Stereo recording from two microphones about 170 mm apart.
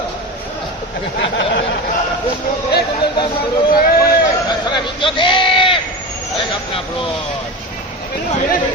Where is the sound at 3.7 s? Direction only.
60° left (ahead or behind).